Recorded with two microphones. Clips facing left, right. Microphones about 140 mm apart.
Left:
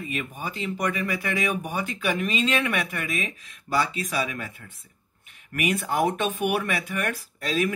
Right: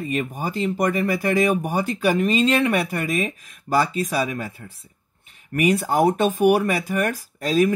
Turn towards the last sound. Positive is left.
turn(degrees=-40)  # may be behind; listen again after turning